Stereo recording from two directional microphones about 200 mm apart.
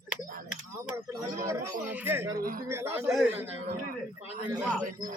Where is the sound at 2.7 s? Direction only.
10° right (ahead or behind).